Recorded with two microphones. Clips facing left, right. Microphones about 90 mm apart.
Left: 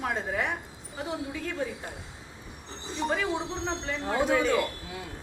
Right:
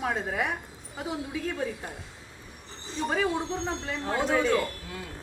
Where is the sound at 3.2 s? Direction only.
Centre (ahead or behind).